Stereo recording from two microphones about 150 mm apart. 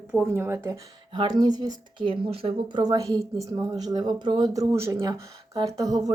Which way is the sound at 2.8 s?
25° right (ahead or behind).